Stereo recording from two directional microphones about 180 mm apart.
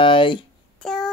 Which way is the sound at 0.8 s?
Centre (ahead or behind).